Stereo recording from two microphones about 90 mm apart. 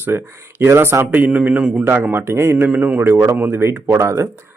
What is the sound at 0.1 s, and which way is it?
Speech, 20° right (ahead or behind).